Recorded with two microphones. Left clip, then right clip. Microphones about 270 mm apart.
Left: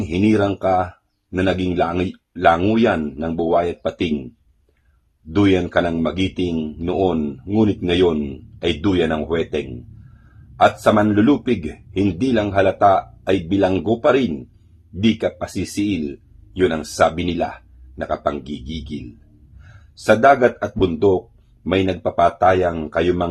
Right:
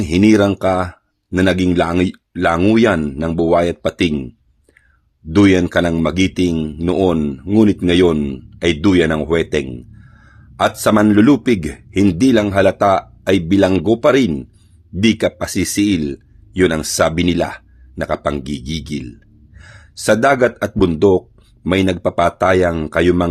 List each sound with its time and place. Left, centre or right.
0.1 s speech: right
5.3 s speech: right
10.6 s speech: right
20.1 s speech: right